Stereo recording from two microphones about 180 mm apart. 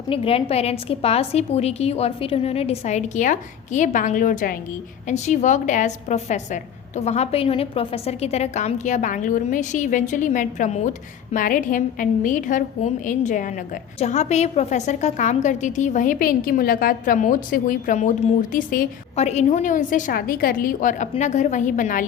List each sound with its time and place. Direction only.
0.1 s a woman's voice: 30° left (ahead or behind); by 18.9 s 50° left (ahead or behind)
19.1 s a woman's voice: 40° left (ahead or behind)